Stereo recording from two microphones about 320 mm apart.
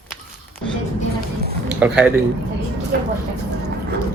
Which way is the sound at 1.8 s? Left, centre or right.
Centre.